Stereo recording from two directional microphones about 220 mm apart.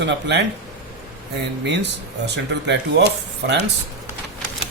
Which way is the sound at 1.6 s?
50° right (ahead or behind).